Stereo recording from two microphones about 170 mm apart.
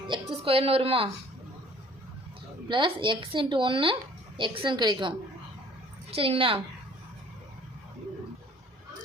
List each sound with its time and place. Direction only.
0.1 s a woman's voice: 35° right (ahead or behind)
2.6 s a woman's voice: 30° right (ahead or behind)